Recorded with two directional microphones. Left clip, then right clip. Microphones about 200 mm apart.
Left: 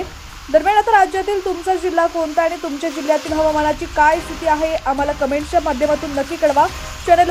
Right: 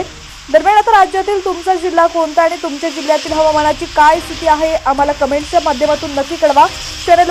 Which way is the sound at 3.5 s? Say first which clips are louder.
Right 5 dB; 10° right (ahead or behind).